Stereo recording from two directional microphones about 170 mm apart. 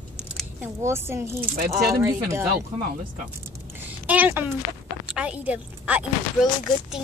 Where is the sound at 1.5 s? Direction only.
55° right (ahead or behind).